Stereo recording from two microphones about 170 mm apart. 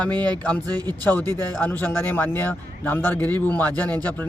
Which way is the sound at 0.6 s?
25° right (ahead or behind).